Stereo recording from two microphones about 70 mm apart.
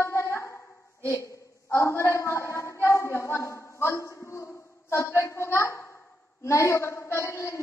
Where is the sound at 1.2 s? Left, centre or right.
Left.